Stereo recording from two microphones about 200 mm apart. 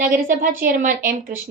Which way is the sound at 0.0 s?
45° right (ahead or behind).